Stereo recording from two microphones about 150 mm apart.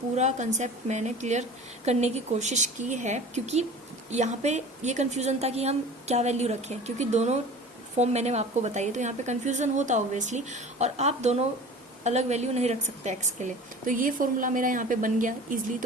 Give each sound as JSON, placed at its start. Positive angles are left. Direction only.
{"t": 0.2, "sound": "a woman's voice", "side_deg": -50}